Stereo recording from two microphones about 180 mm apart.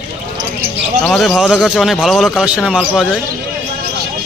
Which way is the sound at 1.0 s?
Centre (ahead or behind).